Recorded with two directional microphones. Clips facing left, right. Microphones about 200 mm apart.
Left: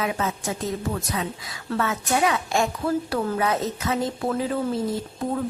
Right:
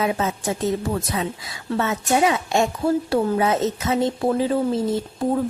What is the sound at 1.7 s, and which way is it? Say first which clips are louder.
A woman's voice: right 3 dB; 25° right (ahead or behind).